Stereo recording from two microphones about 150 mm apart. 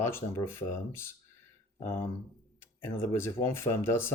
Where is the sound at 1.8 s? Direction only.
15° left (ahead or behind).